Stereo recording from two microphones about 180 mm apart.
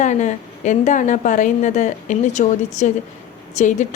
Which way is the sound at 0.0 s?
40° left (ahead or behind).